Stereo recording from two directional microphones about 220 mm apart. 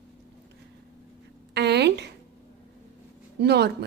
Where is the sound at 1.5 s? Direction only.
50° right (ahead or behind).